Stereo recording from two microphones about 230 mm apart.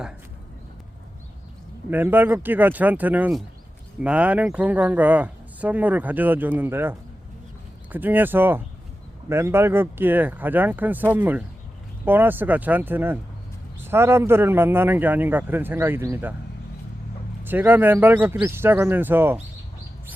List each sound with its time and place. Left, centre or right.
1.9 s speech: centre
7.9 s speech: centre
17.4 s speech: centre